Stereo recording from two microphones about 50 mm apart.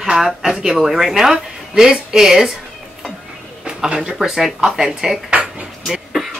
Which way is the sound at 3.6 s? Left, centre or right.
Centre.